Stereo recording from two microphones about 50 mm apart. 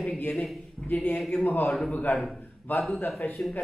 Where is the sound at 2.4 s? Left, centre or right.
Left.